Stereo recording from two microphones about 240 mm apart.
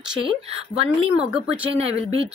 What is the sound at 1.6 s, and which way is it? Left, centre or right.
Speech, right.